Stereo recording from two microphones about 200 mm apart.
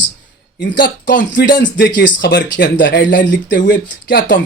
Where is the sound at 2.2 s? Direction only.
60° left (ahead or behind).